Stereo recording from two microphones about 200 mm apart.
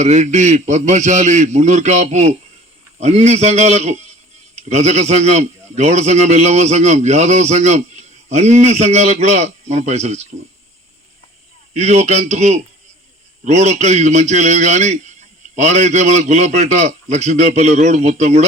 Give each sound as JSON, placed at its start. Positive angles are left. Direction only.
{"t": 0.0, "sound": "a man's voice", "side_deg": -35}
{"t": 11.7, "sound": "a man's voice", "side_deg": -35}